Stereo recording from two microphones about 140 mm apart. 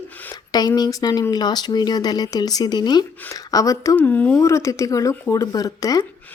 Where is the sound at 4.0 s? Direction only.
10° left (ahead or behind).